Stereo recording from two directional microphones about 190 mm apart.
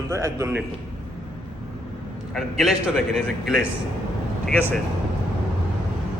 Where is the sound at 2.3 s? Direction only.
Centre (ahead or behind).